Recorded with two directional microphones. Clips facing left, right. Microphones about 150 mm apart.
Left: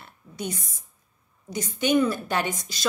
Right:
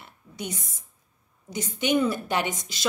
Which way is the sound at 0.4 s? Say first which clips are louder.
Left 2 dB; 20° right (ahead or behind).